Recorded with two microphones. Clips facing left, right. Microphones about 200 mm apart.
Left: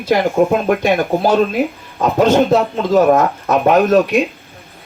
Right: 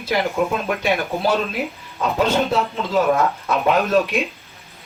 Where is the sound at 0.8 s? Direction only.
45° left (ahead or behind).